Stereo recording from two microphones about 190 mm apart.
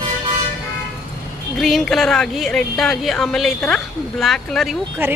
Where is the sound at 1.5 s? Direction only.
Centre (ahead or behind).